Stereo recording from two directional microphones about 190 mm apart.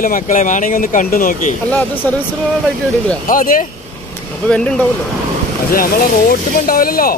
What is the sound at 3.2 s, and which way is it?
Speech, 45° left (ahead or behind).